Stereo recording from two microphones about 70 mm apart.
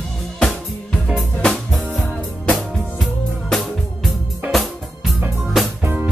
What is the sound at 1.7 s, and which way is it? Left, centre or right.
Music, centre.